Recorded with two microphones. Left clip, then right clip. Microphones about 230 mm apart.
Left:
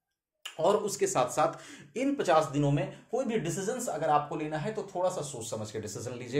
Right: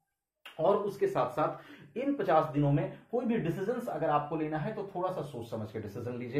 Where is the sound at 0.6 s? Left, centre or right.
Left.